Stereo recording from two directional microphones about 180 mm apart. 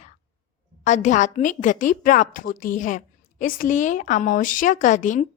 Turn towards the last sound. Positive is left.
turn(degrees=45)  # may be behind; listen again after turning